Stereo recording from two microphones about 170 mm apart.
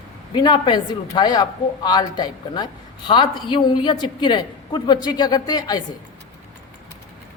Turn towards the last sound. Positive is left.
turn(degrees=25)  # may be behind; listen again after turning